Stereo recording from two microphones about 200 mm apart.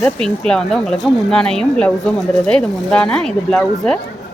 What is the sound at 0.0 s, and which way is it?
Speech, 5° left (ahead or behind).